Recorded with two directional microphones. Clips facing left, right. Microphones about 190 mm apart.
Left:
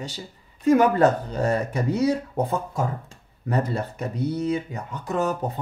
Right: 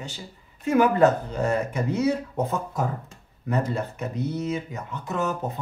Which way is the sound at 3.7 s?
35° left (ahead or behind).